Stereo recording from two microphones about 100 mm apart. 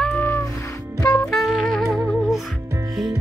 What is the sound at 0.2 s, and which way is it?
Music, 25° left (ahead or behind).